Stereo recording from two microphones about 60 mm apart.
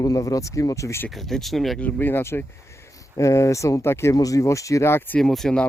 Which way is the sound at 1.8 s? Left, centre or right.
Left.